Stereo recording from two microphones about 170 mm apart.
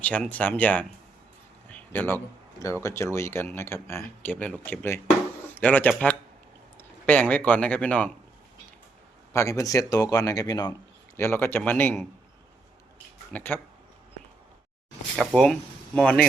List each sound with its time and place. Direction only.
0.0 s speech: 10° left (ahead or behind)
1.7 s a sound: 10° left (ahead or behind)
2.8 s speech: 15° left (ahead or behind)
9.3 s speech: 20° left (ahead or behind)
11.2 s speech: 15° left (ahead or behind)
13.3 s speech: 10° left (ahead or behind)
15.2 s speech: centre (ahead or behind)